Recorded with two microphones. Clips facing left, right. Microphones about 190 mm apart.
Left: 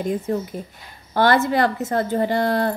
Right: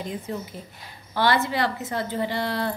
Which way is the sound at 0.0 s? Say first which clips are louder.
Left 8 dB; 50° left (ahead or behind).